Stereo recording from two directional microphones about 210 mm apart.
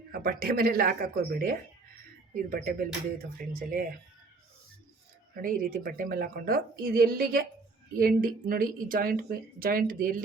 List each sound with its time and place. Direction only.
0.1 s a woman's voice: 45° right (ahead or behind)
5.4 s a woman's voice: 40° right (ahead or behind)